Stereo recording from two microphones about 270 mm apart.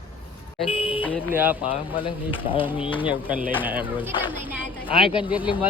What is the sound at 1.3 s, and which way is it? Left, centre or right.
Speech, centre.